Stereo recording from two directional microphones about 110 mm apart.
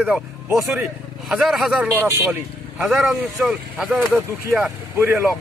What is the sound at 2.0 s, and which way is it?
Speech, 20° right (ahead or behind).